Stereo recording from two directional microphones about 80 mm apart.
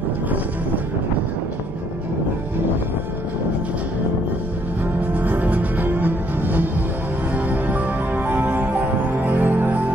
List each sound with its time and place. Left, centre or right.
5.1 s music: right